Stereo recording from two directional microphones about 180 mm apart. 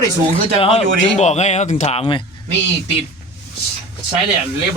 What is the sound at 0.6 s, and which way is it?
Speech, 35° left (ahead or behind).